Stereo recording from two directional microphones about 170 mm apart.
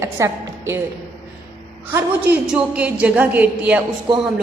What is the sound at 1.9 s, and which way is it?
A woman's voice, 10° right (ahead or behind).